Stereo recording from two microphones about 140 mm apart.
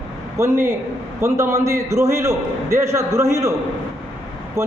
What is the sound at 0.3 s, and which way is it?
A man's voice, 20° right (ahead or behind).